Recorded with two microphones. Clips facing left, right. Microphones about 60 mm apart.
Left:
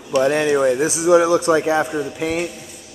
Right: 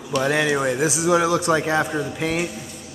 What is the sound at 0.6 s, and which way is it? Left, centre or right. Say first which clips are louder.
Speech: left 4 dB; centre.